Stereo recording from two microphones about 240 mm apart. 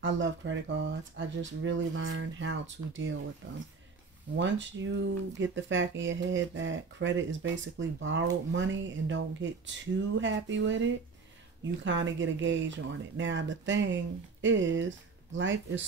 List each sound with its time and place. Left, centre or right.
0.0 s speech: right
4.4 s speech: right